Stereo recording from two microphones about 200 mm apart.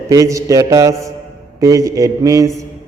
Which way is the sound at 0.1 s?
15° right (ahead or behind).